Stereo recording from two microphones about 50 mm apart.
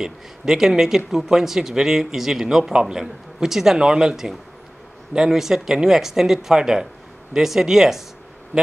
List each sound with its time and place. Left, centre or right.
0.0 s speech: centre